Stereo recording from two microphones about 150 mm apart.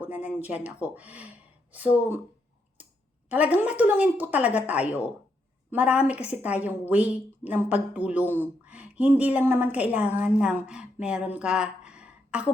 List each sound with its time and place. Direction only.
0.0 s speech: 10° right (ahead or behind)
3.2 s a woman's voice: 10° right (ahead or behind)
11.3 s a sound: 5° right (ahead or behind)